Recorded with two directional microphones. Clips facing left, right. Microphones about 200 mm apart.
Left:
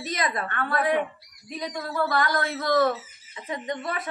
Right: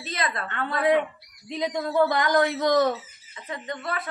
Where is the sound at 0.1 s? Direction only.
20° left (ahead or behind).